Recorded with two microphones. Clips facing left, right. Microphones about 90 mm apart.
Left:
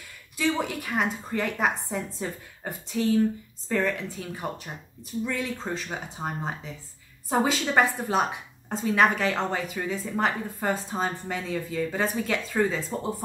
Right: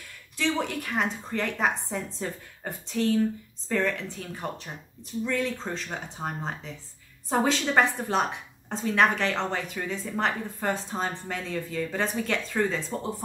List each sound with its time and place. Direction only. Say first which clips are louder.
0.4 s a woman's voice: left 1 dB; 5° left (ahead or behind)